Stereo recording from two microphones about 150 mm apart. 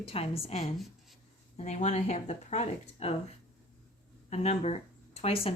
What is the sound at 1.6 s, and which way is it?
Speech, 50° left (ahead or behind).